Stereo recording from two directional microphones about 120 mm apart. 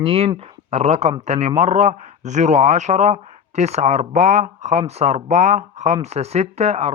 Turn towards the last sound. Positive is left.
turn(degrees=-60)  # may be behind; listen again after turning